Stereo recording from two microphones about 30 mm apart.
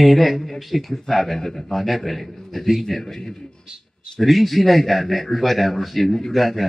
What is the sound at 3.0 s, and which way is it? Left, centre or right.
Speech, centre.